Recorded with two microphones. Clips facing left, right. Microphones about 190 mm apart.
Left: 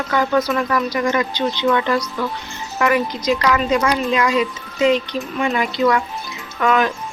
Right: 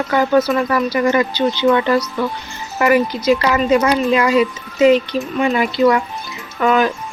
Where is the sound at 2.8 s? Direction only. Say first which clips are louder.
Right 4 dB; 5° right (ahead or behind).